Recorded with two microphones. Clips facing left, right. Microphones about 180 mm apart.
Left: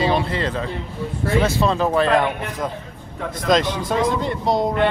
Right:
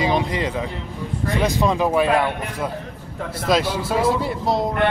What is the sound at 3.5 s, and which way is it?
Speech, 5° right (ahead or behind).